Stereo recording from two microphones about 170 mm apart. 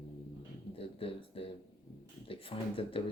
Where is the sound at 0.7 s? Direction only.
35° left (ahead or behind).